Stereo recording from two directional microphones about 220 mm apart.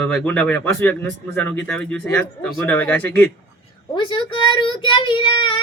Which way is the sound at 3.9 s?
20° left (ahead or behind).